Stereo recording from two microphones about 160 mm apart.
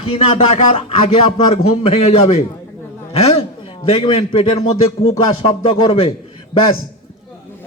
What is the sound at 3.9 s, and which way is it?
Music, 35° left (ahead or behind).